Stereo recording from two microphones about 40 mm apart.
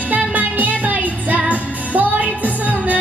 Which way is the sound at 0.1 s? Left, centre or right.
Right.